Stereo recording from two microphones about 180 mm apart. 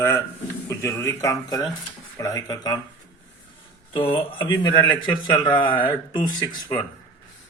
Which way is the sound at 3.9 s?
30° left (ahead or behind).